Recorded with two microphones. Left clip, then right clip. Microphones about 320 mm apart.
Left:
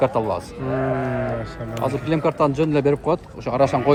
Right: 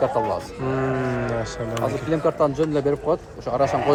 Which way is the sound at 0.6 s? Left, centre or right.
Centre.